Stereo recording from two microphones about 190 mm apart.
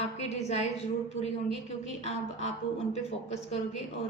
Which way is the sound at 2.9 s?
35° left (ahead or behind).